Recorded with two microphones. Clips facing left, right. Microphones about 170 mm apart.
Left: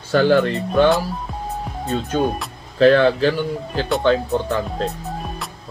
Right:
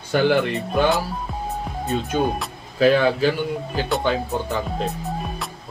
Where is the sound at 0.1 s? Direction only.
15° right (ahead or behind).